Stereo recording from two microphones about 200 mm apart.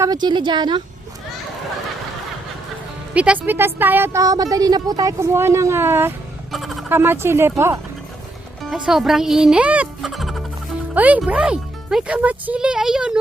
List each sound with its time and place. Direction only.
0.0 s a woman's voice: 20° right (ahead or behind)
3.2 s speech: 5° right (ahead or behind)
6.5 s a sound: centre (ahead or behind)
6.9 s speech: 10° right (ahead or behind)
8.7 s speech: centre (ahead or behind)